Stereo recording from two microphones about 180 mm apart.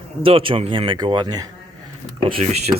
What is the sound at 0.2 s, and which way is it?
Speech, 30° right (ahead or behind).